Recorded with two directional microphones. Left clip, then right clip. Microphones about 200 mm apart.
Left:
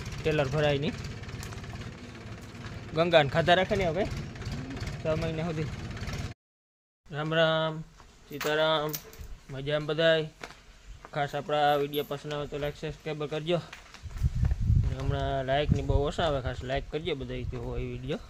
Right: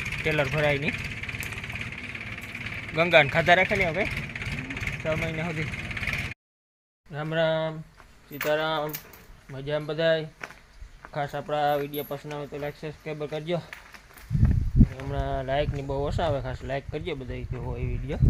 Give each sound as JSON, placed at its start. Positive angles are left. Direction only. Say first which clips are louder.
{"t": 0.3, "sound": "speech", "louder": "right 2 dB", "side_deg": 5}
{"t": 0.9, "sound": "vehicle", "louder": "right 10 dB", "side_deg": 50}
{"t": 2.9, "sound": "speech", "louder": "right 3 dB", "side_deg": 5}
{"t": 4.1, "sound": "vehicle", "louder": "right 9 dB", "side_deg": 50}
{"t": 5.0, "sound": "speech", "louder": "even", "side_deg": 10}
{"t": 5.6, "sound": "vehicle", "louder": "right 10 dB", "side_deg": 50}
{"t": 7.1, "sound": "speech", "louder": "even", "side_deg": 0}
{"t": 14.9, "sound": "speech", "louder": "right 1 dB", "side_deg": 0}